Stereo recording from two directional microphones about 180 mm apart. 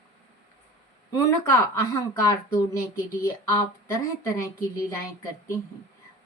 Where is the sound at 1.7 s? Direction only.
15° left (ahead or behind).